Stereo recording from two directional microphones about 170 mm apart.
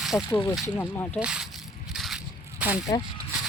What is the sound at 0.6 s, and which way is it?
Speech, 15° left (ahead or behind).